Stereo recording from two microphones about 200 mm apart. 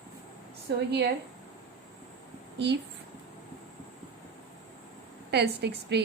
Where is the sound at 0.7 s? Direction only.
60° right (ahead or behind).